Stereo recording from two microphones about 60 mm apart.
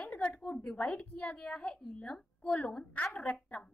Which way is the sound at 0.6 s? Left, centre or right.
Centre.